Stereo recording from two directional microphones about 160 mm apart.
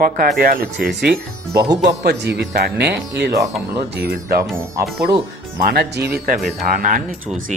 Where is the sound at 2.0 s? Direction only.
90° right.